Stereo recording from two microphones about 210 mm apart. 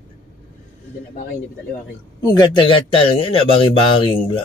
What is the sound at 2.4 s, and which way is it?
Speech, 25° left (ahead or behind).